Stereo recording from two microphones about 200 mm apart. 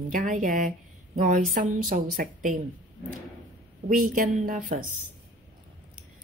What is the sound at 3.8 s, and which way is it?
Speech, 45° right (ahead or behind).